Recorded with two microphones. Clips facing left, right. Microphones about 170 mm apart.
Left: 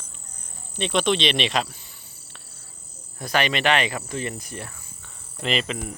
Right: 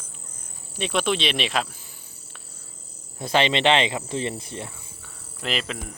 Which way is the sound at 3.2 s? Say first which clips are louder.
Right 2 dB; 25° right (ahead or behind).